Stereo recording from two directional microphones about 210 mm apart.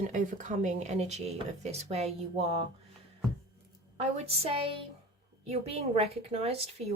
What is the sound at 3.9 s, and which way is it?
Speech, 30° right (ahead or behind).